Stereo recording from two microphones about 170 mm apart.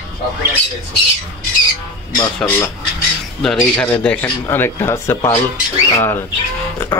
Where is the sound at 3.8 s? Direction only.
10° left (ahead or behind).